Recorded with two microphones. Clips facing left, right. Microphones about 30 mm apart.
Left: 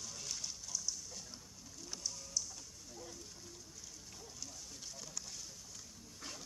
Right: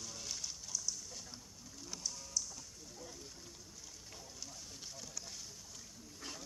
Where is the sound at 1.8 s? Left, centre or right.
Centre.